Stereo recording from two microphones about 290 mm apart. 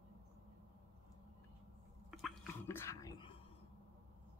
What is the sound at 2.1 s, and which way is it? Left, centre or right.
Whispering, centre.